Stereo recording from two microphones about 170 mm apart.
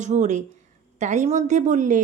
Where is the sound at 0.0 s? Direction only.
45° right (ahead or behind).